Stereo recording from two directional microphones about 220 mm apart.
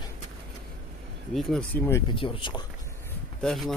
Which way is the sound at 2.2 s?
25° left (ahead or behind).